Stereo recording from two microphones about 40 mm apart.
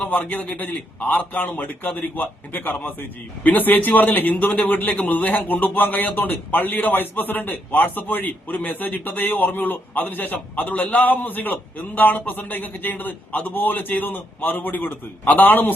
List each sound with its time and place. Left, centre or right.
0.1 s a man's voice: left